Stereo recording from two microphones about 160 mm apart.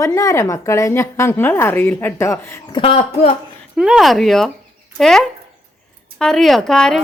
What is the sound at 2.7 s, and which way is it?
Speech, 35° left (ahead or behind).